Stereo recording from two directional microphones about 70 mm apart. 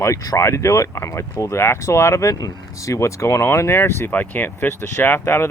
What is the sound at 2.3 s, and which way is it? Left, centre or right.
Speech, left.